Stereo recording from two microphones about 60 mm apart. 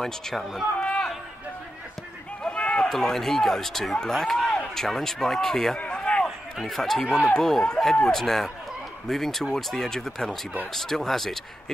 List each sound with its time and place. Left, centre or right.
0.0 s speech: centre
0.7 s run: centre
2.4 s run: centre
2.9 s speech: centre
5.8 s a sound: centre
6.2 s speech: centre